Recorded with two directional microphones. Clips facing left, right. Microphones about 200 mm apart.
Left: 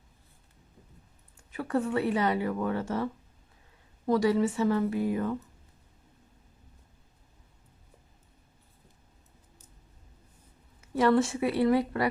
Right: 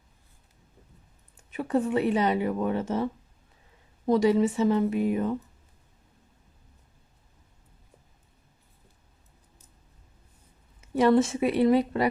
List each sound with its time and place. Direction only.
1.5 s speech: 20° right (ahead or behind)
10.9 s speech: 20° right (ahead or behind)